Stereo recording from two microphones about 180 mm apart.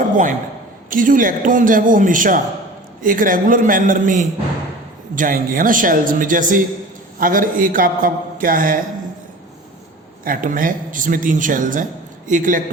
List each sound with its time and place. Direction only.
0.0 s a sound: 45° right (ahead or behind)
0.9 s a man's voice: 50° right (ahead or behind)
10.2 s a man's voice: 50° right (ahead or behind)